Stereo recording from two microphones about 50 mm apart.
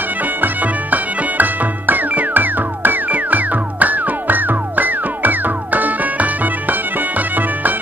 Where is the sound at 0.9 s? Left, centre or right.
Right.